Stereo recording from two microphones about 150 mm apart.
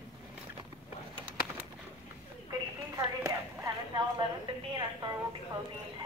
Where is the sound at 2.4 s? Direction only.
25° right (ahead or behind).